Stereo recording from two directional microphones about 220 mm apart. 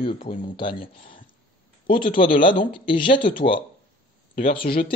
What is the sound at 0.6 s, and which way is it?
Speech, 25° left (ahead or behind).